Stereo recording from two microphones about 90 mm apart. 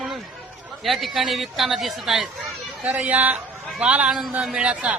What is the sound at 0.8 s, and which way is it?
A man's voice, centre (ahead or behind).